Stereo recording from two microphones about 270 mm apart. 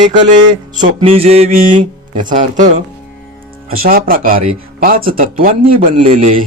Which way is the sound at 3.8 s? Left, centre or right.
Right.